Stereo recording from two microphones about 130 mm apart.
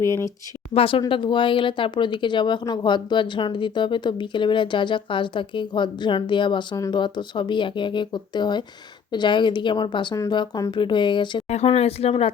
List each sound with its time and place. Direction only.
0.0 s speech: 20° left (ahead or behind)
0.7 s speech: 45° left (ahead or behind)
11.4 s speech: 55° left (ahead or behind)